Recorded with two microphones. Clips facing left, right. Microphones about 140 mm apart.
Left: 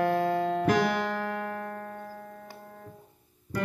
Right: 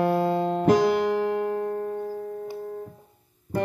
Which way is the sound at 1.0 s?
20° right (ahead or behind).